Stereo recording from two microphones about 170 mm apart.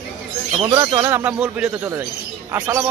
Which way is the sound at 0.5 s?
30° right (ahead or behind).